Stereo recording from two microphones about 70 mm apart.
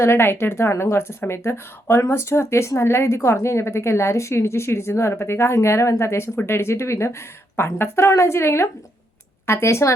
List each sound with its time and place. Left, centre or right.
0.0 s speech: left